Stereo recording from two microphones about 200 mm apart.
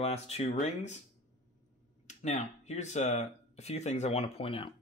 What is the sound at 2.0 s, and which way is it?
Speech, 35° left (ahead or behind).